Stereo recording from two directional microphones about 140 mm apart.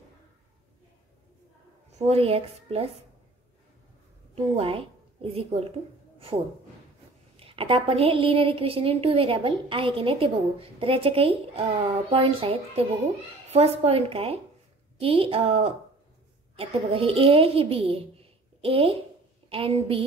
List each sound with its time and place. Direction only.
1.9 s a woman's voice: 50° right (ahead or behind)
4.6 s a woman's voice: 45° right (ahead or behind)
6.1 s a sound: 40° right (ahead or behind)
7.3 s a woman's voice: 40° right (ahead or behind)